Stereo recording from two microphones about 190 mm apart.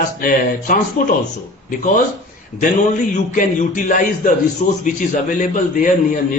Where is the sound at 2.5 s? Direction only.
40° left (ahead or behind).